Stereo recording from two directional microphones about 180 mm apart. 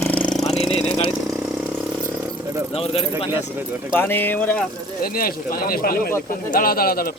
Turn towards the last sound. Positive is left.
turn(degrees=55)  # may be behind; listen again after turning